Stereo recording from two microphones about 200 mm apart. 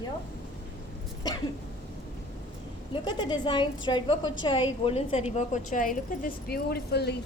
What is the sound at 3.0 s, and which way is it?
A woman's voice, 20° left (ahead or behind).